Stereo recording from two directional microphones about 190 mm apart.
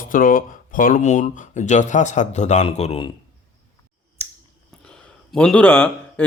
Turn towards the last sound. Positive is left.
turn(degrees=5)  # may be behind; listen again after turning